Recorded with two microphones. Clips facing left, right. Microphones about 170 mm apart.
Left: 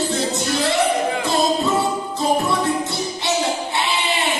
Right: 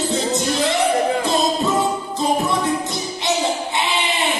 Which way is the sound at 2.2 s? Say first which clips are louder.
Even; 20° right (ahead or behind).